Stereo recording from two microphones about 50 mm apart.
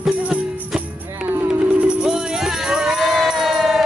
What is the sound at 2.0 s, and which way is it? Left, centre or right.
Music, centre.